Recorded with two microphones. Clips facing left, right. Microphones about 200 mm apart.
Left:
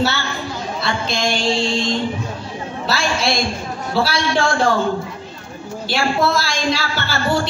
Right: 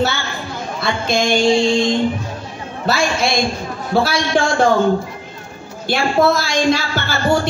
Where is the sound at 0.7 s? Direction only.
50° right (ahead or behind).